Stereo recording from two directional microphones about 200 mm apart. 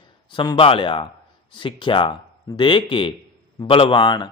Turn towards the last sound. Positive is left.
turn(degrees=20)  # may be behind; listen again after turning